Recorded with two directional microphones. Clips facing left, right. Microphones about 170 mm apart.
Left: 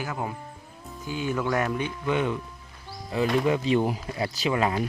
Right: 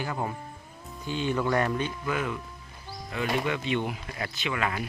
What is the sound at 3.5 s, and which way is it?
Speech, 35° left (ahead or behind).